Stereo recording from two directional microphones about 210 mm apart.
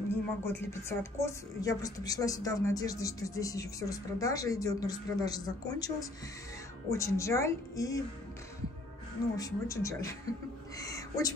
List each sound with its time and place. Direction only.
0.1 s a woman's voice: 10° left (ahead or behind)
9.4 s a woman's voice: 15° left (ahead or behind)